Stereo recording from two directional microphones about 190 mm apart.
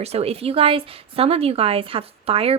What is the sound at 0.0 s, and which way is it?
A woman's voice, 35° right (ahead or behind).